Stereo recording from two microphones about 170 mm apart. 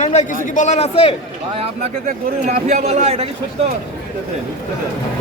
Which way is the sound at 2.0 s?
45° right (ahead or behind).